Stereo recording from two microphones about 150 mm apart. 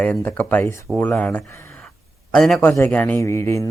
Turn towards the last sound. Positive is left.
turn(degrees=20)  # may be behind; listen again after turning